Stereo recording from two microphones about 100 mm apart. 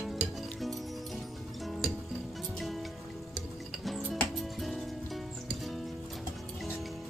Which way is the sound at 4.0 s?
Centre (ahead or behind).